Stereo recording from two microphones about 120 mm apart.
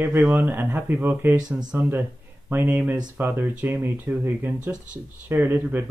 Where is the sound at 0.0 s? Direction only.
15° right (ahead or behind).